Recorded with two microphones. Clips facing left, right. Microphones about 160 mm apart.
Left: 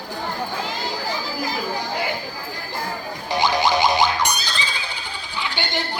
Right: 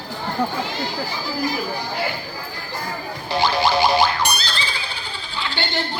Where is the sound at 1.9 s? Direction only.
15° left (ahead or behind).